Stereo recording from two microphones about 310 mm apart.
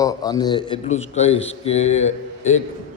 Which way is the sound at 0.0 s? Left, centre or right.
Centre.